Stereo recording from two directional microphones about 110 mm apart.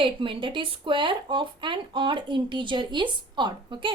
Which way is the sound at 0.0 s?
50° right (ahead or behind).